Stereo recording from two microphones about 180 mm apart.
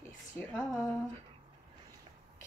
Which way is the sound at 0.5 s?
15° left (ahead or behind).